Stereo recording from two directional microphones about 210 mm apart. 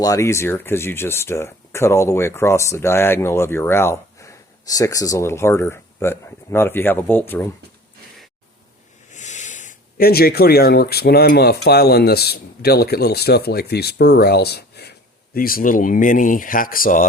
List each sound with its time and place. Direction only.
0.0 s speech: 15° left (ahead or behind)
9.0 s speech: 35° left (ahead or behind)